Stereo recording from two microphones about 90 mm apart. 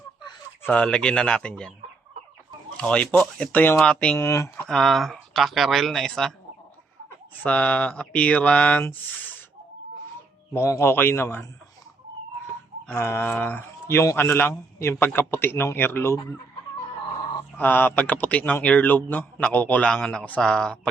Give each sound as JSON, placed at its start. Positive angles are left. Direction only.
{"t": 0.7, "sound": "a man's voice", "side_deg": 10}
{"t": 2.7, "sound": "a man's voice", "side_deg": 15}
{"t": 4.2, "sound": "speech", "side_deg": 30}
{"t": 4.7, "sound": "speech", "side_deg": 5}
{"t": 7.4, "sound": "a man's voice", "side_deg": 15}
{"t": 10.5, "sound": "speech", "side_deg": 30}
{"t": 13.0, "sound": "speech", "side_deg": 25}
{"t": 14.2, "sound": "speech", "side_deg": 20}
{"t": 17.6, "sound": "a man's voice", "side_deg": 20}